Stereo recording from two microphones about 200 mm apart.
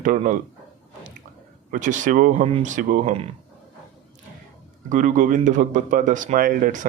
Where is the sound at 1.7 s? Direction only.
40° right (ahead or behind).